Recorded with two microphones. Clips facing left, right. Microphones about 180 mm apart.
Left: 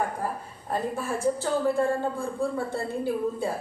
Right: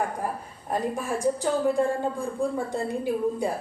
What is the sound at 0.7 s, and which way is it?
A woman's voice, 15° right (ahead or behind).